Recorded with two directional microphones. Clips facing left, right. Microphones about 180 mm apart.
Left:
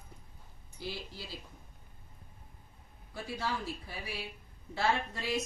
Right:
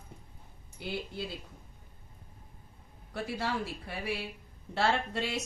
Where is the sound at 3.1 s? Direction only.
70° right (ahead or behind).